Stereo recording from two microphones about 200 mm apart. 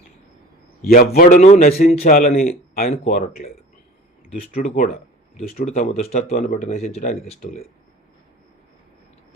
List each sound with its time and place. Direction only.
0.9 s a man's voice: 45° left (ahead or behind)
1.4 s a man's voice: 35° left (ahead or behind)
4.5 s a man's voice: 35° left (ahead or behind)